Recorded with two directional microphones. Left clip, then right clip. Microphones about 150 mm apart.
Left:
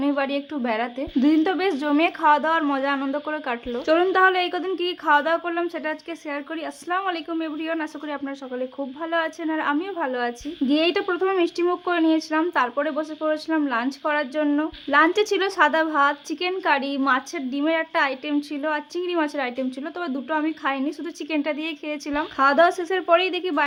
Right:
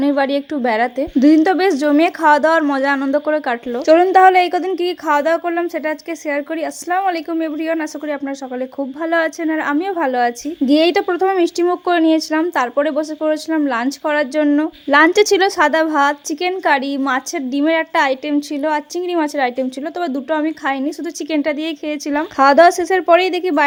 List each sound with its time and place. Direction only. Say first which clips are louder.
0.0 s a woman's voice: right 7 dB; 35° right (ahead or behind)
14.9 s a woman's voice: right 7 dB; 50° right (ahead or behind)